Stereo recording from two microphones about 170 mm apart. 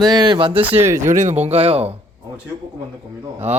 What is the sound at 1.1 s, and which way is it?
Speech, 45° right (ahead or behind).